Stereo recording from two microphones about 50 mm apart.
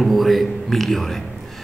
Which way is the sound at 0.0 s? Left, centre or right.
Centre.